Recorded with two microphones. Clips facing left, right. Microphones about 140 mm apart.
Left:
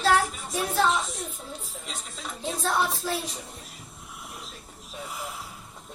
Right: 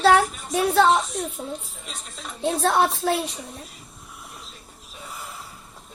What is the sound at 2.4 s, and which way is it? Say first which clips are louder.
Speech: right 7 dB; 70° right (ahead or behind).